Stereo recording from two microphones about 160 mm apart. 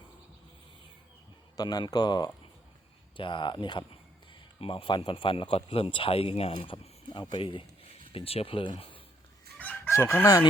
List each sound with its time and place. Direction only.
1.5 s speech: 25° left (ahead or behind)
9.6 s chicken: 10° left (ahead or behind)